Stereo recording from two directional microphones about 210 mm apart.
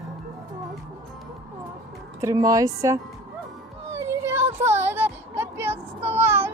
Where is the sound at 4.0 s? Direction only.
10° right (ahead or behind).